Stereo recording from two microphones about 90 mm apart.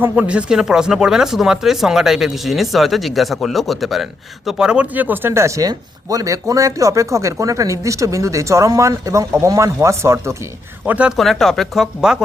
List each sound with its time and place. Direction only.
0.0 s speech: 15° right (ahead or behind); by 10.3 s 30° right (ahead or behind)
10.8 s speech: 15° right (ahead or behind)
11.2 s speech: 5° left (ahead or behind)